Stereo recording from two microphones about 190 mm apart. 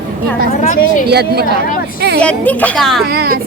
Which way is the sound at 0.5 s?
40° left (ahead or behind).